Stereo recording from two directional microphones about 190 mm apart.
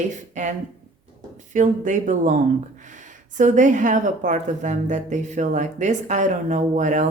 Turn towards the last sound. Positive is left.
turn(degrees=-40)  # may be behind; listen again after turning